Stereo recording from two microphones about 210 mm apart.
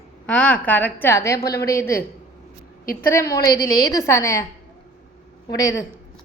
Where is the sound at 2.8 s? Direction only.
45° left (ahead or behind).